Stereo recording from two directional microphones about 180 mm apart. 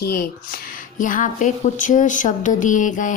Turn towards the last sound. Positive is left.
turn(degrees=45)  # may be behind; listen again after turning